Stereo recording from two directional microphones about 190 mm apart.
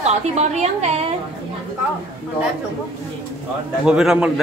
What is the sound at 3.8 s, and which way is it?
Speech, 5° right (ahead or behind).